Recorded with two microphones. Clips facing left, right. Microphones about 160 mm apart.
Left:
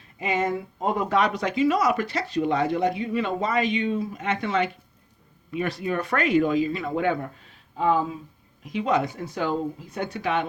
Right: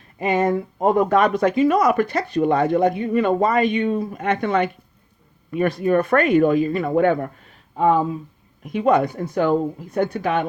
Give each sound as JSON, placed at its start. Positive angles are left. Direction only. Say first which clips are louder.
{"t": 0.2, "sound": "speech", "louder": "right 6 dB", "side_deg": -55}